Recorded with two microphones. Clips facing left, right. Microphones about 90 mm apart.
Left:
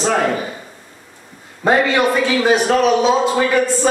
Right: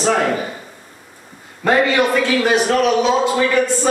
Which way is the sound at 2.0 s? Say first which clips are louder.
Left 1 dB; 10° left (ahead or behind).